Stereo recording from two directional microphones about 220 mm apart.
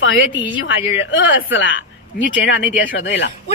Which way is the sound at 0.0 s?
60° left (ahead or behind).